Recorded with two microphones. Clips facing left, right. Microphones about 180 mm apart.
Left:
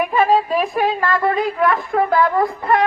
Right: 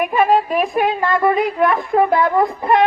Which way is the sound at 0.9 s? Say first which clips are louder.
Right 2 dB; 20° right (ahead or behind).